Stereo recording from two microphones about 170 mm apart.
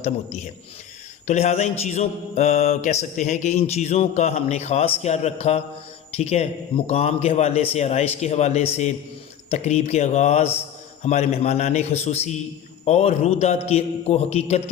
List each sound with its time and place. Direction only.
0.0 s mantra: 40° left (ahead or behind)